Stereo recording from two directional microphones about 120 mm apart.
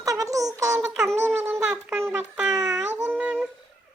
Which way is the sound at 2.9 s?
15° right (ahead or behind).